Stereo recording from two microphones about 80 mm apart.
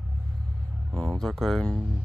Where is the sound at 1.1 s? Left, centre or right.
Centre.